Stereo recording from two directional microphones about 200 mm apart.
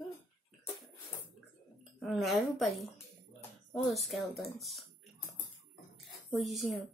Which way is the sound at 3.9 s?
Centre (ahead or behind).